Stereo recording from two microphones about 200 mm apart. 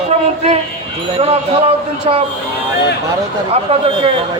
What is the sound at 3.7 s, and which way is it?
Speech, 25° right (ahead or behind).